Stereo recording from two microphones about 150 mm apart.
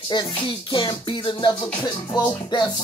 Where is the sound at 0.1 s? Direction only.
30° left (ahead or behind).